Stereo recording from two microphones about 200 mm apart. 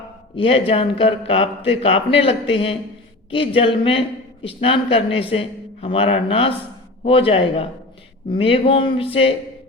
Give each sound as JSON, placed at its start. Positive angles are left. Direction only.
{"t": 0.3, "sound": "speech", "side_deg": 30}